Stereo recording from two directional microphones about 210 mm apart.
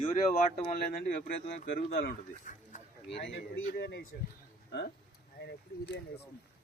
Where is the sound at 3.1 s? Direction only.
55° left (ahead or behind).